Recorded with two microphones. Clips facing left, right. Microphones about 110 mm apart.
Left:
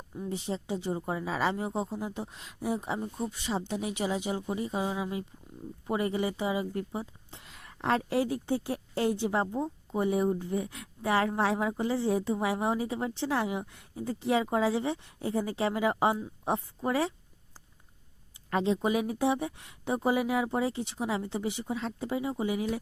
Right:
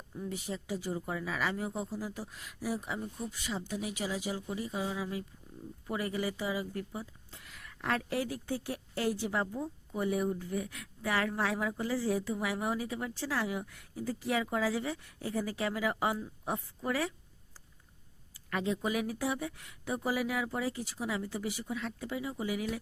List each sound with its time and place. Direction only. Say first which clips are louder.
0.2 s a woman's voice: left 4 dB; 25° left (ahead or behind)
18.5 s a woman's voice: left 5 dB; 25° left (ahead or behind)